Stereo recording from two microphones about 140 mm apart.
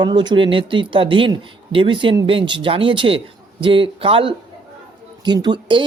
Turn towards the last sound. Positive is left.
turn(degrees=-30)  # may be behind; listen again after turning